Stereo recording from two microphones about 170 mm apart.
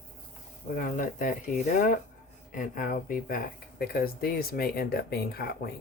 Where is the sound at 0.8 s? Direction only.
50° left (ahead or behind).